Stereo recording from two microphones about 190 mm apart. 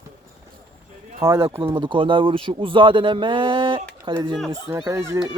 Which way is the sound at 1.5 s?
25° right (ahead or behind).